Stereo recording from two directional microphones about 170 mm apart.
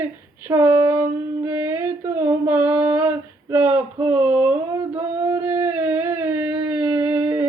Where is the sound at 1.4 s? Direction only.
15° right (ahead or behind).